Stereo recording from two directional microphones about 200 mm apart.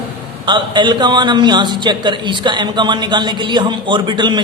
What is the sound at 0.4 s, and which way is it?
A man's voice, 25° right (ahead or behind).